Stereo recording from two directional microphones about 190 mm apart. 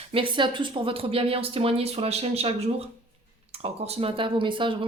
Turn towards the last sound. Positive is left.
turn(degrees=-25)  # may be behind; listen again after turning